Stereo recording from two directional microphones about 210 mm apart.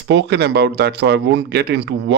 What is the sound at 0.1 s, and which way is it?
Speech, 55° right (ahead or behind).